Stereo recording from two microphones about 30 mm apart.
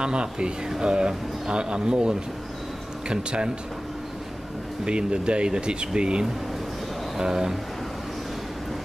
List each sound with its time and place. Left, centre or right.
0.0 s speech: right
4.8 s speech: right
7.2 s speech: centre